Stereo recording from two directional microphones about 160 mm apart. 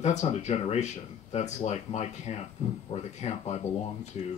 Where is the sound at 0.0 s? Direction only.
45° left (ahead or behind).